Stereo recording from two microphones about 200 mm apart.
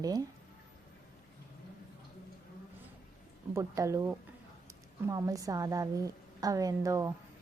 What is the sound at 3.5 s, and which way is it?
A woman's voice, 15° right (ahead or behind).